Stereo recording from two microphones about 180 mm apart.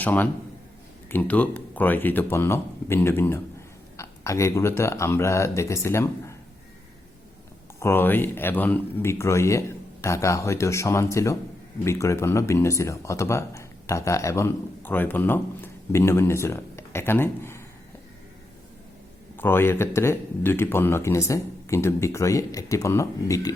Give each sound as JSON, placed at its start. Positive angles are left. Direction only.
{"t": 0.0, "sound": "a man's voice", "side_deg": 10}
{"t": 7.8, "sound": "speech", "side_deg": 15}
{"t": 19.4, "sound": "speech", "side_deg": 10}